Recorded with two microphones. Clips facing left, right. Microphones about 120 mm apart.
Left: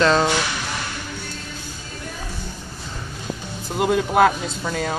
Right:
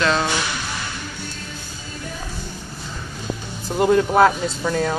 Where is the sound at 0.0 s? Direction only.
30° left (ahead or behind).